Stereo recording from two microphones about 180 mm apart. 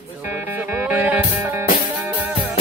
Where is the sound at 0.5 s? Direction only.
10° right (ahead or behind).